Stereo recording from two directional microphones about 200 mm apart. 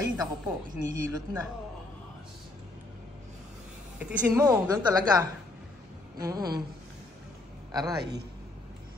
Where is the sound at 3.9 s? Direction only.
15° right (ahead or behind).